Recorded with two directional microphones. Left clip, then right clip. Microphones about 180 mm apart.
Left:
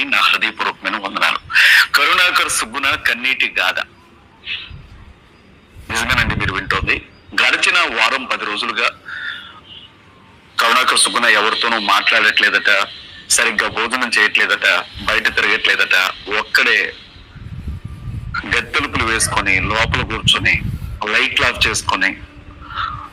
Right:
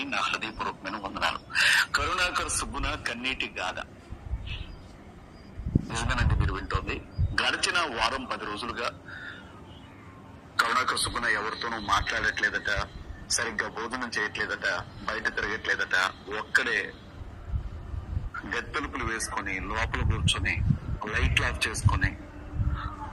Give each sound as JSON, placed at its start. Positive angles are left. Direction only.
{"t": 0.0, "sound": "a sound", "side_deg": 10}
{"t": 4.4, "sound": "owl", "side_deg": 10}
{"t": 5.9, "sound": "a man's voice", "side_deg": 15}
{"t": 10.8, "sound": "speech", "side_deg": 30}
{"t": 11.1, "sound": "speech", "side_deg": 60}
{"t": 11.5, "sound": "speech", "side_deg": 25}
{"t": 18.3, "sound": "speech", "side_deg": 25}
{"t": 22.7, "sound": "a sound", "side_deg": 25}